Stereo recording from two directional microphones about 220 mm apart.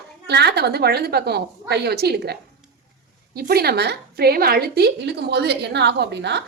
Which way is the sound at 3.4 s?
45° right (ahead or behind).